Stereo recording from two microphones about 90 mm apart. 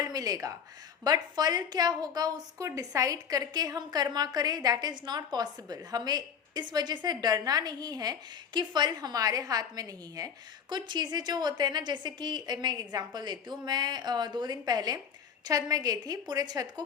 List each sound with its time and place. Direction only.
0.0 s a woman's voice: 45° right (ahead or behind)